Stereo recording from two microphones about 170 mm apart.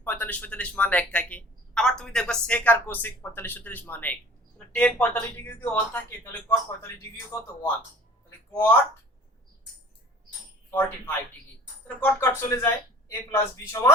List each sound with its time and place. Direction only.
0.0 s a man's voice: 10° left (ahead or behind)
8.5 s a man's voice: 10° left (ahead or behind)
10.7 s a man's voice: 10° left (ahead or behind)